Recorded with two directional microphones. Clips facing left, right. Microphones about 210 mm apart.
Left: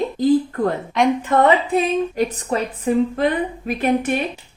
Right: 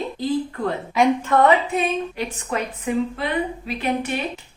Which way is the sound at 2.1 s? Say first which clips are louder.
Left 5 dB; 40° left (ahead or behind).